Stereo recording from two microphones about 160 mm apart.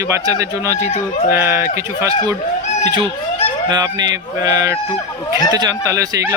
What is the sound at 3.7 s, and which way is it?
Speech, 25° right (ahead or behind).